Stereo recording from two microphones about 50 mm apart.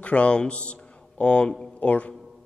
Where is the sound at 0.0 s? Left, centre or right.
Left.